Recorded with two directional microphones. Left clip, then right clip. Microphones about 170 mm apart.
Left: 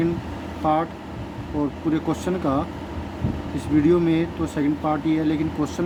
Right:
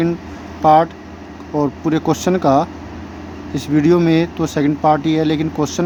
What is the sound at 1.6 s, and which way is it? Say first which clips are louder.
Speech: right 6 dB; 50° right (ahead or behind).